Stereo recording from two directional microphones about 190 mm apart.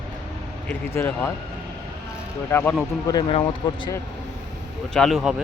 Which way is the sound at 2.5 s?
15° left (ahead or behind).